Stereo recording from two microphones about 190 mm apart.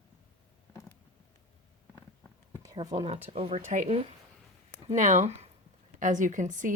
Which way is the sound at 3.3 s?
30° right (ahead or behind).